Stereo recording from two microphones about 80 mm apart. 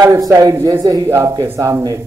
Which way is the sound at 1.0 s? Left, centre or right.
Right.